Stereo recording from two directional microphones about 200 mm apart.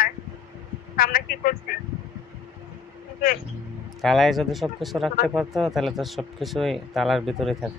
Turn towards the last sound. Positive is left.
turn(degrees=0)  # may be behind; listen again after turning